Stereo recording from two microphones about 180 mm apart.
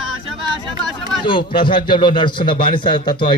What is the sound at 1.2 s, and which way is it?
A man's voice, 25° left (ahead or behind).